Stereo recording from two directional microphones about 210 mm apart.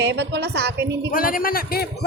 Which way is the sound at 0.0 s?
55° right (ahead or behind).